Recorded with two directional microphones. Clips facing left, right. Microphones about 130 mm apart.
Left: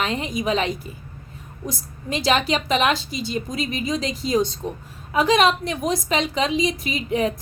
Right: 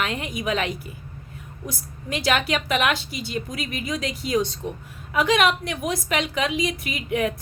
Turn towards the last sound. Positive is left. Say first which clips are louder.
# left 2 dB
turn(degrees=30)  # may be behind; listen again after turning